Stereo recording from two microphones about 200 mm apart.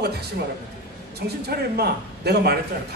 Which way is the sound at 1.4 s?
55° right (ahead or behind).